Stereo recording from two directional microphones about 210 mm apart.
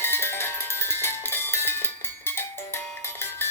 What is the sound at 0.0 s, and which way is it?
Music, 10° left (ahead or behind).